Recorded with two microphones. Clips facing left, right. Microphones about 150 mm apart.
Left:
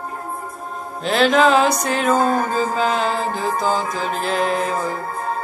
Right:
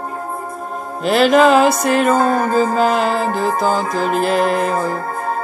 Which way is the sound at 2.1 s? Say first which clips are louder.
Right 2 dB; 45° right (ahead or behind).